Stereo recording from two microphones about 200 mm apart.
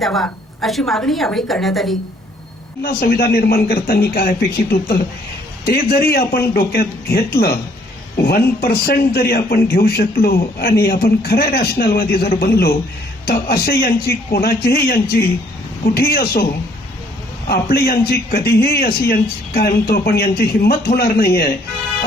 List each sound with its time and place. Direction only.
0.0 s a woman's voice: centre (ahead or behind)
2.8 s a man's voice: 50° left (ahead or behind)
17.5 s a man's voice: 50° left (ahead or behind)